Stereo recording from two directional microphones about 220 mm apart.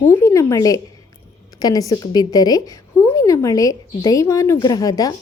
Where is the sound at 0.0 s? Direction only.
10° left (ahead or behind).